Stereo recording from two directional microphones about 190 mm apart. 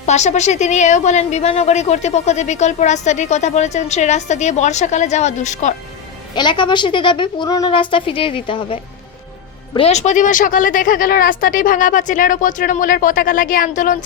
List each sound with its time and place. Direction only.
0.0 s speech: 35° left (ahead or behind)
6.3 s a woman's voice: 25° left (ahead or behind); by 14.0 s 45° left (ahead or behind)